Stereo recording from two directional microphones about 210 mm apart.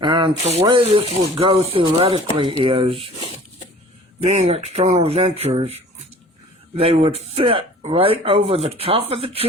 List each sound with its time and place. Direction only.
0.0 s speech: 20° right (ahead or behind)
4.2 s speech: 30° right (ahead or behind)